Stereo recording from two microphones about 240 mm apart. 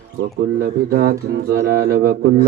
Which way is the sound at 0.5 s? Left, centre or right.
Right.